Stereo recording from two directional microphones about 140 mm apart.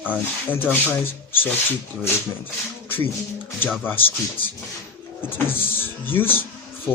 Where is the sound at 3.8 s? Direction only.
15° left (ahead or behind).